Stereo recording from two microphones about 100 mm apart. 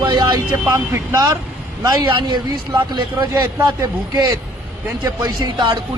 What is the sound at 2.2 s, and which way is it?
Speech, 50° right (ahead or behind).